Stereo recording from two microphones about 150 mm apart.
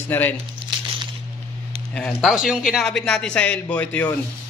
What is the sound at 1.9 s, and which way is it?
A man's voice, centre (ahead or behind).